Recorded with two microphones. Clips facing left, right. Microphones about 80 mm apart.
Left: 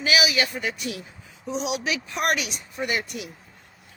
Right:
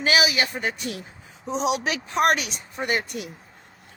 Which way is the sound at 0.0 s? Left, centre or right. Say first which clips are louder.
Right 1 dB; right.